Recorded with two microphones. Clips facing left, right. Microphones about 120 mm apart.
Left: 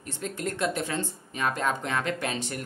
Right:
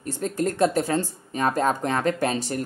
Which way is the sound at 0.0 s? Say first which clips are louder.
Right 7 dB; 40° right (ahead or behind).